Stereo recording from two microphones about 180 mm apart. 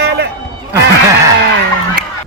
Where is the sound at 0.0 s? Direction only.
65° right (ahead or behind).